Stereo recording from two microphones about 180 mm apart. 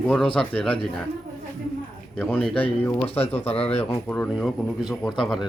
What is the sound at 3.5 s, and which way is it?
Speech, 35° left (ahead or behind).